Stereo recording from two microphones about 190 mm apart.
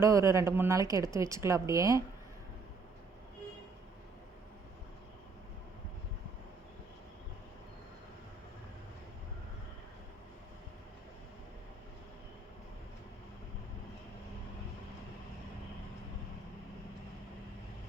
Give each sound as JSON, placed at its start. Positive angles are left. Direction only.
{"t": 0.0, "sound": "a woman's voice", "side_deg": -15}